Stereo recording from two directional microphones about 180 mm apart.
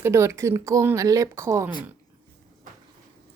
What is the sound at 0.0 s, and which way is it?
Speech, 15° right (ahead or behind).